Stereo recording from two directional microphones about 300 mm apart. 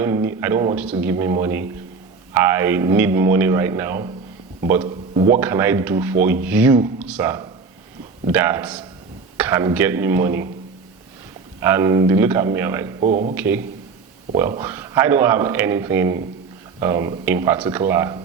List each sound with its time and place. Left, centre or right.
0.0 s a man's voice: centre
11.6 s speech: centre
13.0 s speech: right
13.3 s speech: centre